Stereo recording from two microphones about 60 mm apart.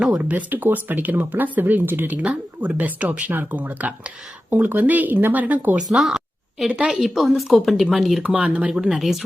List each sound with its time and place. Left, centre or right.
0.2 s speech: right
5.9 s a sound: centre
6.7 s a woman's voice: centre
8.2 s speech: right
9.0 s speech: centre